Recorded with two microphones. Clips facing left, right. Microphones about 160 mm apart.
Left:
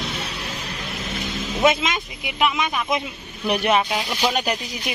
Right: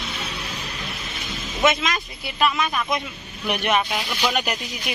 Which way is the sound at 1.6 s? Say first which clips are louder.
Left 2 dB; 30° left (ahead or behind).